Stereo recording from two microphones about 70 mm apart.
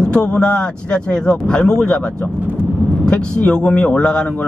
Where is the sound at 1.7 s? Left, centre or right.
Centre.